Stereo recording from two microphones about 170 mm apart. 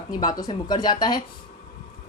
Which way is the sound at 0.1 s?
25° left (ahead or behind).